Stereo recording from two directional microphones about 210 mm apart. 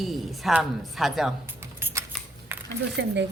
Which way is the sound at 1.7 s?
10° right (ahead or behind).